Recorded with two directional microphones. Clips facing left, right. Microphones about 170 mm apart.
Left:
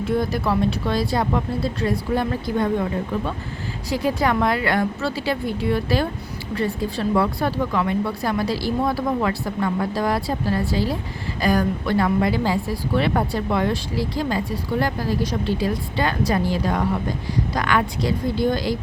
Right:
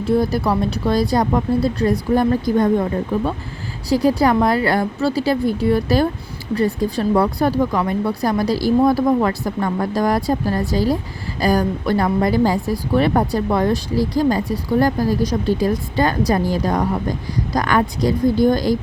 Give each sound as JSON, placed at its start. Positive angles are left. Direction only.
{"t": 0.1, "sound": "a woman's voice", "side_deg": -35}
{"t": 3.8, "sound": "a woman's voice", "side_deg": -35}